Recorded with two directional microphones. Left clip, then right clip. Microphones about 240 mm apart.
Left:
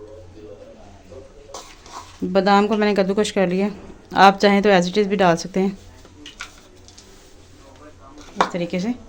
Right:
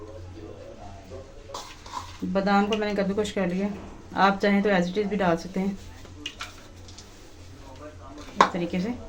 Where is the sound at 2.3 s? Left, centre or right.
Left.